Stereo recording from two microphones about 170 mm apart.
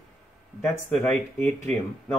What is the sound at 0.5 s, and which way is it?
Speech, 10° left (ahead or behind).